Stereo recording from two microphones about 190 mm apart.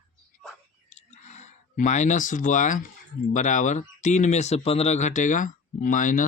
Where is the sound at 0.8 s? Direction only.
35° left (ahead or behind).